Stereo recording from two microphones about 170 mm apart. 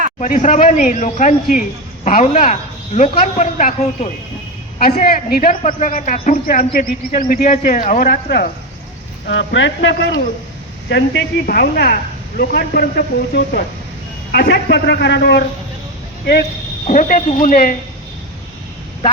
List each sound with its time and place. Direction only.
0.2 s a man's voice: 45° left (ahead or behind)
4.9 s a man's voice: 60° left (ahead or behind)
9.2 s a woman's voice: 90° left; by 13.7 s 60° left (ahead or behind)
14.3 s a woman's voice: 80° left
16.8 s a man's voice: 45° left (ahead or behind)